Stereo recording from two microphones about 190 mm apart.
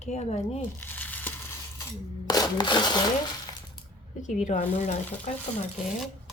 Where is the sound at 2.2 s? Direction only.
20° left (ahead or behind).